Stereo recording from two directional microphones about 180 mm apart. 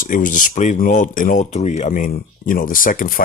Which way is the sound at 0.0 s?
45° left (ahead or behind).